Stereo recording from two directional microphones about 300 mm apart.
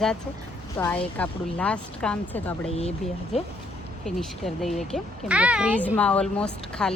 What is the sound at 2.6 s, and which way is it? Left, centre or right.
Speech, centre.